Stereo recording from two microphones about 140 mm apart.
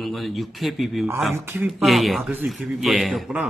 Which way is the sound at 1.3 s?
15° right (ahead or behind).